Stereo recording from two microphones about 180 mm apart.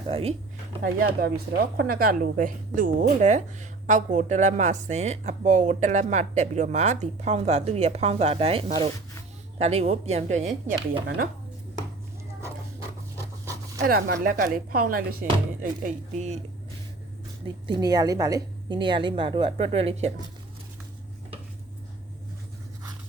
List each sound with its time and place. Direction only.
0.1 s speech: 35° right (ahead or behind)
0.8 s speech: 60° right (ahead or behind); by 10.5 s 40° right (ahead or behind)
13.4 s pant: 15° right (ahead or behind)
13.8 s a woman's voice: 55° right (ahead or behind)
15.8 s speech: 40° right (ahead or behind)
17.7 s a woman's voice: 20° right (ahead or behind)